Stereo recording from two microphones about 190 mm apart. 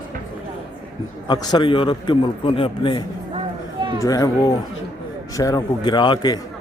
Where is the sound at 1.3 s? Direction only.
20° left (ahead or behind).